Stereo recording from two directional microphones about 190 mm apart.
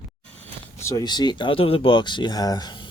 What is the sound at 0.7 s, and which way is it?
Speech, 15° left (ahead or behind).